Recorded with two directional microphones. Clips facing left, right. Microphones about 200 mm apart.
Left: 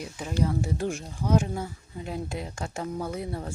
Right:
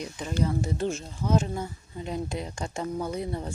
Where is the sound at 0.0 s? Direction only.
10° left (ahead or behind).